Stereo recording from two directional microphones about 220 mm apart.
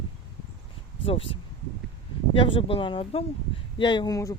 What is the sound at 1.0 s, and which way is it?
Speech, 25° left (ahead or behind).